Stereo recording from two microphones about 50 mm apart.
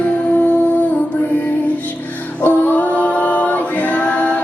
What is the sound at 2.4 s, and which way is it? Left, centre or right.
Singing, left.